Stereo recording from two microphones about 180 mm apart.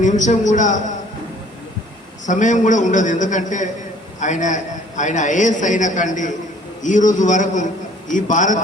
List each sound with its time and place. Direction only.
0.0 s a man's voice: 45° left (ahead or behind)
2.2 s a man's voice: 45° left (ahead or behind)